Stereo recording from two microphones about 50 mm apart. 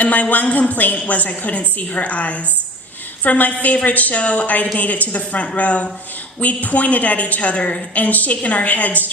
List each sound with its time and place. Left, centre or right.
0.0 s a woman's voice: left